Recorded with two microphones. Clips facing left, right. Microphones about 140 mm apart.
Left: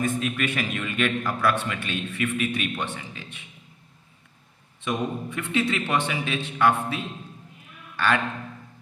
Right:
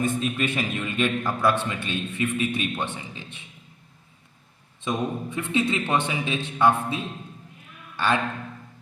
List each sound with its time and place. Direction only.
0.0 s a man's voice: 25° right (ahead or behind)
4.9 s a man's voice: 20° right (ahead or behind)